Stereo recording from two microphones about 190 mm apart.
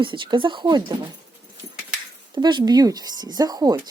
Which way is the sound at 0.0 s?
25° right (ahead or behind).